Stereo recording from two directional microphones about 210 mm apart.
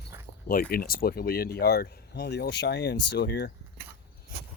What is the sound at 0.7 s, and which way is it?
Speech, 45° left (ahead or behind).